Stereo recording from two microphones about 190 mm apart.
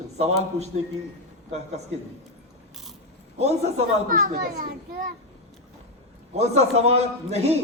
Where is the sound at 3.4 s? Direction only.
35° right (ahead or behind).